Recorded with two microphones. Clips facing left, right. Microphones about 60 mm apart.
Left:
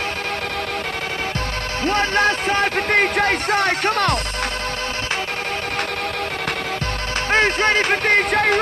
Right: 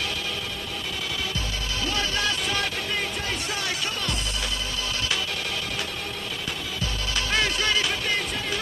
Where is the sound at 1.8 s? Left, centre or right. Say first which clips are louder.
Left 10 dB; left.